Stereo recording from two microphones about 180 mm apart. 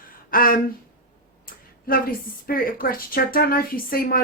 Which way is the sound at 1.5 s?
55° left (ahead or behind).